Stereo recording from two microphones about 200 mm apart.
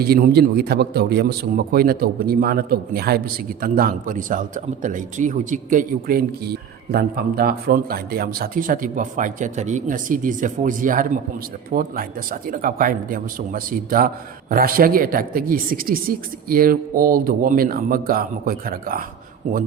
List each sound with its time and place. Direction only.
0.0 s a man's voice: 50° right (ahead or behind)